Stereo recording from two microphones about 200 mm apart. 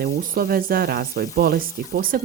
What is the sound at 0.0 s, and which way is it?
Speech, 45° right (ahead or behind).